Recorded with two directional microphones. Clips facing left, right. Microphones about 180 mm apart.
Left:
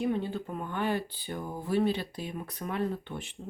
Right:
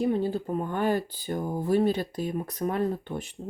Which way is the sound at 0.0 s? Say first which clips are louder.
Right 5 dB; 35° right (ahead or behind).